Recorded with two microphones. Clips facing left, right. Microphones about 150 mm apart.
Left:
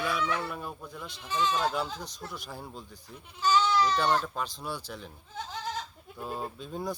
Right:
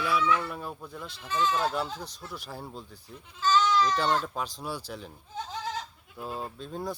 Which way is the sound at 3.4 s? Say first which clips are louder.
Right 1 dB; 15° left (ahead or behind).